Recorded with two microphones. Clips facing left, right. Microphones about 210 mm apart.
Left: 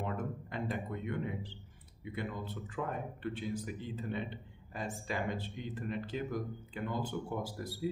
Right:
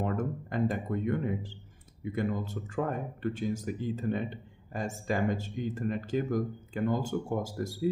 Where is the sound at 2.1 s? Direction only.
45° right (ahead or behind).